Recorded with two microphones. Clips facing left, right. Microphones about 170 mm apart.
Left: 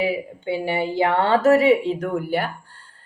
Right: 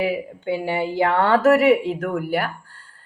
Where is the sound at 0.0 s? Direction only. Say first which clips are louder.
Even; 15° left (ahead or behind).